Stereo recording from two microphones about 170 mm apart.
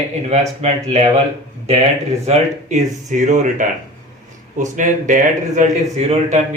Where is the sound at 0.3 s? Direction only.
40° right (ahead or behind).